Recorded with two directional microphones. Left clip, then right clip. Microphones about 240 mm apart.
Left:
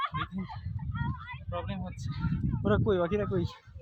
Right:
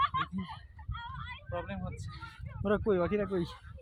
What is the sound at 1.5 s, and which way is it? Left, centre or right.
Speech, left.